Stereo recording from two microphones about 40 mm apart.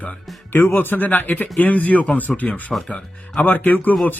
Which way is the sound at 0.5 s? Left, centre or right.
Left.